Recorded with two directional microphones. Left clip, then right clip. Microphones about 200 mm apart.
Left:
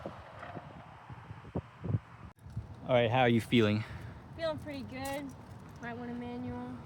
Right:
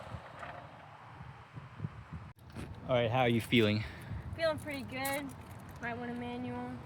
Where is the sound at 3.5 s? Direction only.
10° left (ahead or behind).